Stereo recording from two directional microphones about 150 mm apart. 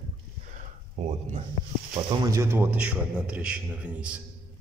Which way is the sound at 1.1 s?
45° right (ahead or behind).